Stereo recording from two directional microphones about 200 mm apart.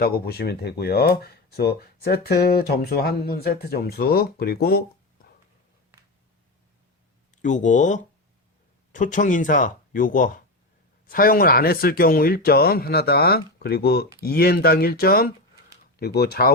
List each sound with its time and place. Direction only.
0.0 s speech: 50° left (ahead or behind)
7.4 s speech: 40° left (ahead or behind)